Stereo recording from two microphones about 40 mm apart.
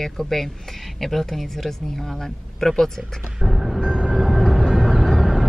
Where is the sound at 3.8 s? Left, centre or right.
Centre.